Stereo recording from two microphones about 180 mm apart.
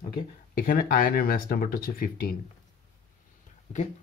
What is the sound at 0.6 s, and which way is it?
Speech, 55° left (ahead or behind).